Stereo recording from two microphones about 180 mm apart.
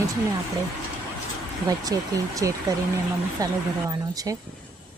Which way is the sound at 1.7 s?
20° right (ahead or behind).